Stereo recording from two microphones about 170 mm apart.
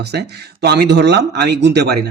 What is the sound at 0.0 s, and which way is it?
Speech, 75° right (ahead or behind).